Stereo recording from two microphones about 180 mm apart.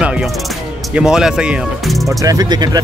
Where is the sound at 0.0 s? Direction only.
5° right (ahead or behind).